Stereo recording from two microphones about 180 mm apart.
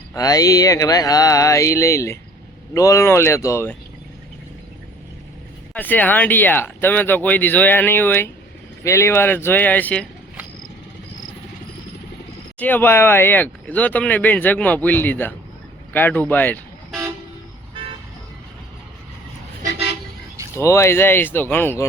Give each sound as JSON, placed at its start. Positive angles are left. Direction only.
{"t": 0.1, "sound": "a sound", "side_deg": 20}
{"t": 2.7, "sound": "speech", "side_deg": 15}
{"t": 5.7, "sound": "speech", "side_deg": 10}
{"t": 12.5, "sound": "speech", "side_deg": 10}
{"t": 20.6, "sound": "speech", "side_deg": 15}